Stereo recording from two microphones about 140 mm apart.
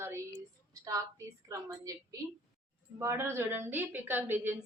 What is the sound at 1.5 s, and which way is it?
A woman's voice, 20° right (ahead or behind).